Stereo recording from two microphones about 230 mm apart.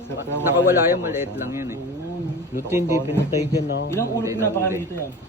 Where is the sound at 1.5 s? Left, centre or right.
Centre.